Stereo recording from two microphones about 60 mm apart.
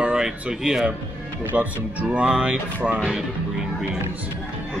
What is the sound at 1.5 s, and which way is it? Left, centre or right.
Speech, right.